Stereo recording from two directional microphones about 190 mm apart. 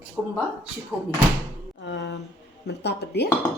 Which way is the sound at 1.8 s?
70° left (ahead or behind).